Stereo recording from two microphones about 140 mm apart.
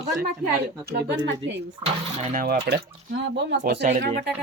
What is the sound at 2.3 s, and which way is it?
Speech, 90° right.